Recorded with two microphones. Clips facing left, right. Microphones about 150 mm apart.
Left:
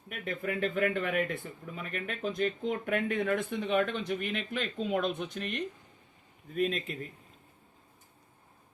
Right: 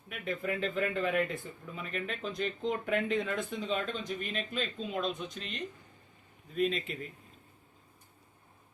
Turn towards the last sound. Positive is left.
turn(degrees=45)  # may be behind; listen again after turning